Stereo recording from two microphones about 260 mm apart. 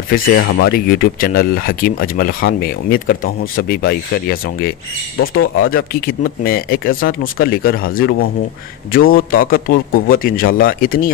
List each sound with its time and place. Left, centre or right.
0.5 s speech: left
5.2 s speech: left
5.7 s speech: left